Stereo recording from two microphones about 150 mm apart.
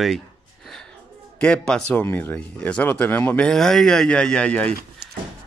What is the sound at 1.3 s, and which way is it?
A man's voice, 10° left (ahead or behind).